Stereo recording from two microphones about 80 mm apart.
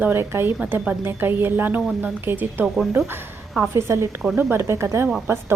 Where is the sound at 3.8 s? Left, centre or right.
Right.